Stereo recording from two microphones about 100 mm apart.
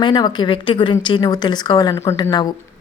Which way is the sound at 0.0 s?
45° left (ahead or behind).